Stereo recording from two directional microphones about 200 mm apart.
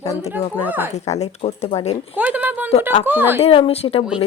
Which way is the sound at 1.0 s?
35° left (ahead or behind).